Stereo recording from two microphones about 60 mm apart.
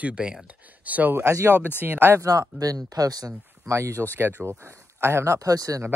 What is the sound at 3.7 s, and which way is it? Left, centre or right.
Speech, right.